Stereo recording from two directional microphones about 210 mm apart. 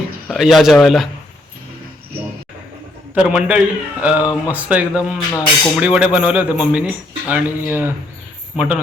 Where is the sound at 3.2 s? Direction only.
5° right (ahead or behind).